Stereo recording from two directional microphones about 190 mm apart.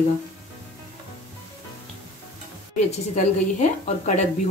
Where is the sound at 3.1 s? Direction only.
40° left (ahead or behind).